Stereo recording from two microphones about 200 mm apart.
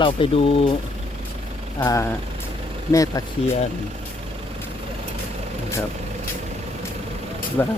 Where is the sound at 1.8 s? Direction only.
15° left (ahead or behind).